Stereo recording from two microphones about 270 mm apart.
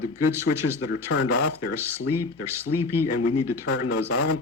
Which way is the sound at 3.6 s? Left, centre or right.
Left.